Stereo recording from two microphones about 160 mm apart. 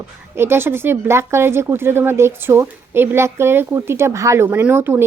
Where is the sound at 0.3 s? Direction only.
15° right (ahead or behind).